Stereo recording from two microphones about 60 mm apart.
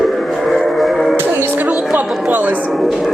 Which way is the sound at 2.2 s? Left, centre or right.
Right.